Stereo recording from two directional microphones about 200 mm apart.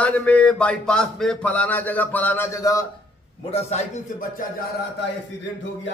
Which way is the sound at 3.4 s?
30° left (ahead or behind).